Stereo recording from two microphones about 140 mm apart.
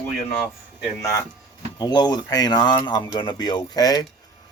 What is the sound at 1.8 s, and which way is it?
Speech, 30° left (ahead or behind).